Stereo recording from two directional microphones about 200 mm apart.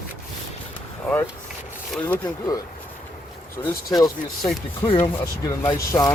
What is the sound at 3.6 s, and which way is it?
Speech, 15° left (ahead or behind).